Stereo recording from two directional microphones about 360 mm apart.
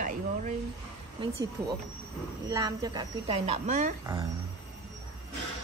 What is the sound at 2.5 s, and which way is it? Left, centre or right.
A man's voice, centre.